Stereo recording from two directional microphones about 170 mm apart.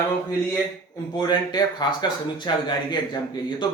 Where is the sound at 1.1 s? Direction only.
25° left (ahead or behind).